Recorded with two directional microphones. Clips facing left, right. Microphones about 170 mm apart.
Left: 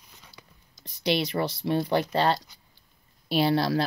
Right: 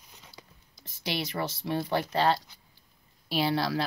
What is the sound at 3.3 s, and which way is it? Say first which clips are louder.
Speech: left 4 dB; 50° left (ahead or behind).